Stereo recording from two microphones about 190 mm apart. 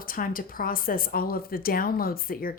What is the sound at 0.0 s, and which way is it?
Speech, 50° left (ahead or behind).